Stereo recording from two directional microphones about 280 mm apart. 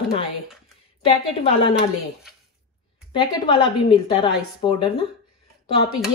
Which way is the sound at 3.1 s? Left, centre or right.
Centre.